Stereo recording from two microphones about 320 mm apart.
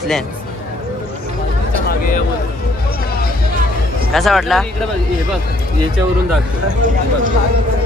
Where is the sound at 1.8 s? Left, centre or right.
Left.